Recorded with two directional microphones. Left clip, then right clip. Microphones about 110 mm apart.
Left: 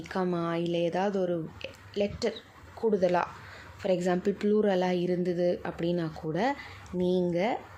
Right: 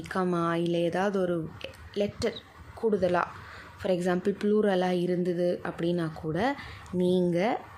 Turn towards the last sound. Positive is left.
turn(degrees=-20)  # may be behind; listen again after turning